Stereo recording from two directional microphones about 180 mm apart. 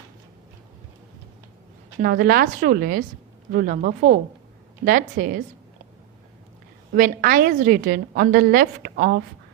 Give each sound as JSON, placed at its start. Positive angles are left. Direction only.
{"t": 2.0, "sound": "a woman's voice", "side_deg": -55}
{"t": 6.9, "sound": "a woman's voice", "side_deg": -55}